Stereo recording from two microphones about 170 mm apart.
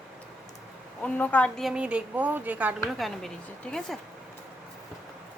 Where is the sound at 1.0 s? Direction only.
10° left (ahead or behind); by 3.1 s 10° right (ahead or behind).